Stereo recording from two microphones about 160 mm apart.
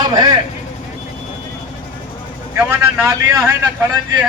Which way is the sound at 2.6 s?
10° right (ahead or behind).